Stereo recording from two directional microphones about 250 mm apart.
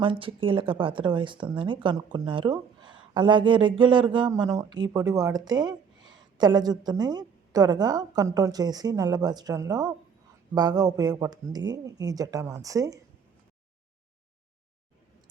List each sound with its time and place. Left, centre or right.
0.0 s speech: right